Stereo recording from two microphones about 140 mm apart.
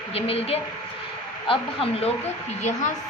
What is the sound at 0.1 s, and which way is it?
A woman's voice, 45° left (ahead or behind).